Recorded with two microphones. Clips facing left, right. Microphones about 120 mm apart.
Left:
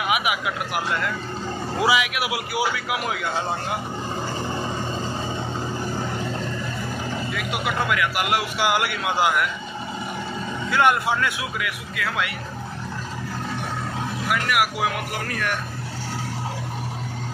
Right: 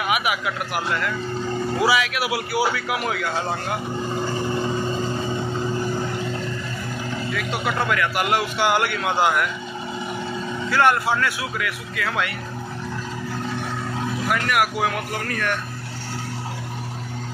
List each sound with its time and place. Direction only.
0.1 s a man's voice: 20° left (ahead or behind)
7.3 s a man's voice: 10° left (ahead or behind)
10.7 s a man's voice: 15° left (ahead or behind)
14.3 s a man's voice: 5° left (ahead or behind)